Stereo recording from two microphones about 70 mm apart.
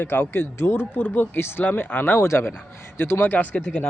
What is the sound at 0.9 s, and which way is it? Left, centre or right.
Speech, left.